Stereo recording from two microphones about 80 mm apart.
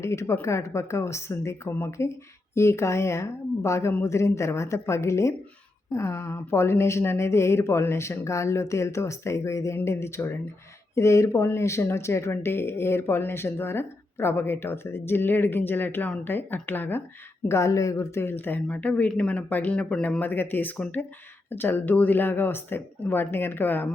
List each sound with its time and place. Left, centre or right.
0.0 s a woman's voice: left
17.5 s a woman's voice: left